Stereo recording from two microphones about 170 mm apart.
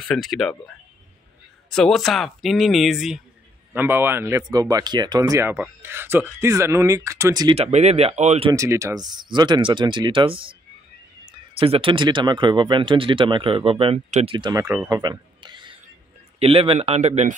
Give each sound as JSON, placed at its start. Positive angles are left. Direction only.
{"t": 0.0, "sound": "speech", "side_deg": 0}
{"t": 1.7, "sound": "speech", "side_deg": 5}
{"t": 3.7, "sound": "speech", "side_deg": -10}
{"t": 7.5, "sound": "speech", "side_deg": -40}
{"t": 8.5, "sound": "speech", "side_deg": -20}
{"t": 11.5, "sound": "speech", "side_deg": -35}
{"t": 14.9, "sound": "a sound", "side_deg": -25}
{"t": 16.3, "sound": "speech", "side_deg": -35}